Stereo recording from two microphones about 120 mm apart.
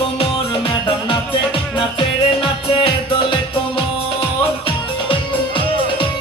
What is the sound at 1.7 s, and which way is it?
Music, 45° left (ahead or behind).